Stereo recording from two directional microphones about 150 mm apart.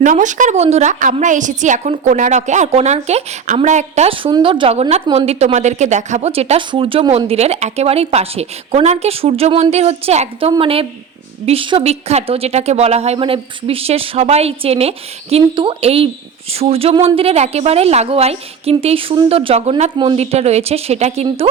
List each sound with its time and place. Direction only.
0.0 s a woman's voice: 55° right (ahead or behind); by 21.5 s 40° right (ahead or behind)